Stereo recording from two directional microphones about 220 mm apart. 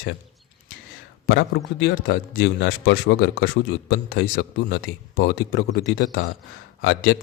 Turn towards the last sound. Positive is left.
turn(degrees=55)  # may be behind; listen again after turning